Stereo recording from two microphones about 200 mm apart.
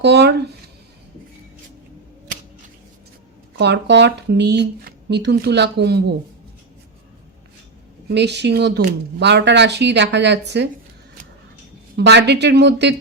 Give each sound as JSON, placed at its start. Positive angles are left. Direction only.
{"t": 0.0, "sound": "speech", "side_deg": -55}
{"t": 3.6, "sound": "speech", "side_deg": -60}
{"t": 8.1, "sound": "speech", "side_deg": -60}
{"t": 11.9, "sound": "speech", "side_deg": -55}